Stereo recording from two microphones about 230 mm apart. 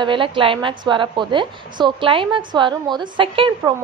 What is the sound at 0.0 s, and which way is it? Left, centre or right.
A woman's voice, right.